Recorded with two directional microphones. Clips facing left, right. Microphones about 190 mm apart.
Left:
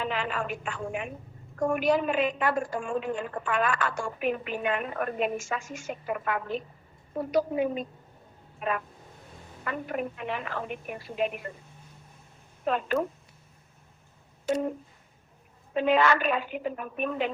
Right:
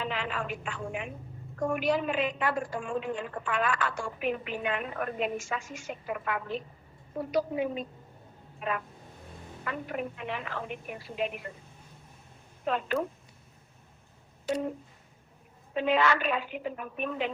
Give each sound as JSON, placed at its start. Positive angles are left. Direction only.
{"t": 0.0, "sound": "a woman's voice", "side_deg": 50}
{"t": 12.6, "sound": "a woman's voice", "side_deg": 45}
{"t": 14.5, "sound": "a woman's voice", "side_deg": 45}
{"t": 15.7, "sound": "a woman's voice", "side_deg": 50}